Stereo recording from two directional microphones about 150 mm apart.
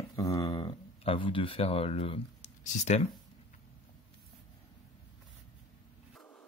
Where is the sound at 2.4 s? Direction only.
50° left (ahead or behind).